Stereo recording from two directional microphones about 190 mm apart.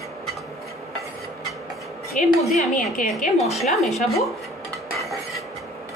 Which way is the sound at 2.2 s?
40° left (ahead or behind).